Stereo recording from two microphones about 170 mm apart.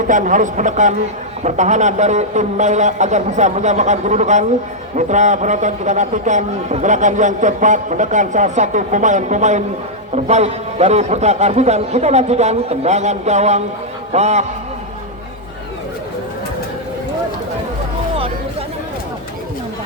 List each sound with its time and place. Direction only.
0.1 s a man's voice: 50° right (ahead or behind)